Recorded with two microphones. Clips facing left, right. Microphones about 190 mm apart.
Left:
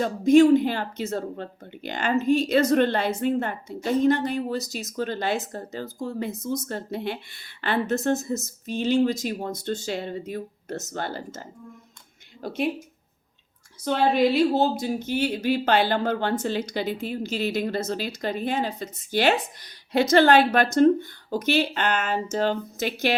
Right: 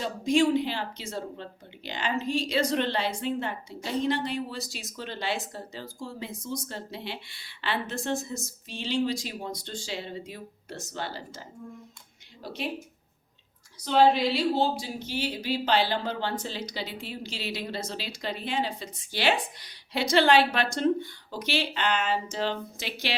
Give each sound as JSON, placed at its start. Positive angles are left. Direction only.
{"t": 0.0, "sound": "speech", "side_deg": 50}
{"t": 13.8, "sound": "speech", "side_deg": 55}